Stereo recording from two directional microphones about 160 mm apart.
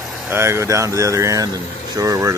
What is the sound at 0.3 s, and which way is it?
Speech, 15° right (ahead or behind).